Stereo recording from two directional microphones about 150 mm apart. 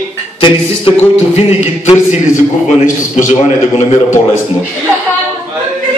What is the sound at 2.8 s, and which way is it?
A man's voice, 55° left (ahead or behind).